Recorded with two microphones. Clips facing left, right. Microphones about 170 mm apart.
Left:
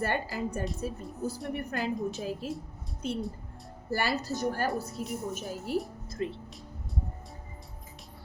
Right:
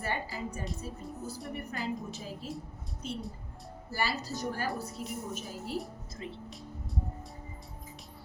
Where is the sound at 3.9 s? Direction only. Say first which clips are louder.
Left 4 dB; 60° left (ahead or behind).